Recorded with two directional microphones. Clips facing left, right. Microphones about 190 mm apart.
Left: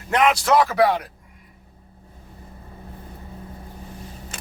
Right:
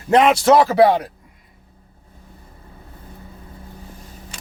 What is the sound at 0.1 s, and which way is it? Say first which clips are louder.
Speech: right 5 dB; 25° right (ahead or behind).